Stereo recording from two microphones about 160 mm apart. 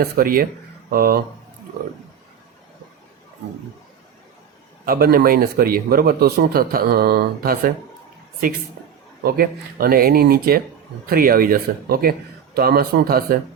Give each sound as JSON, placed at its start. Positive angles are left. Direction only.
{"t": 0.0, "sound": "speech", "side_deg": -65}
{"t": 4.9, "sound": "speech", "side_deg": -70}
{"t": 9.2, "sound": "speech", "side_deg": -70}